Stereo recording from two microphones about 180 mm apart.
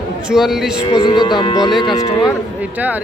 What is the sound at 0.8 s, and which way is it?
Speech, 25° left (ahead or behind).